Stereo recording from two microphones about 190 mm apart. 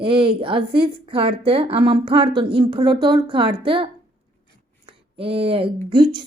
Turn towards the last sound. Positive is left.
turn(degrees=-25)  # may be behind; listen again after turning